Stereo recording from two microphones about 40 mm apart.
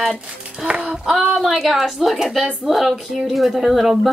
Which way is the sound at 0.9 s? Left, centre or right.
Centre.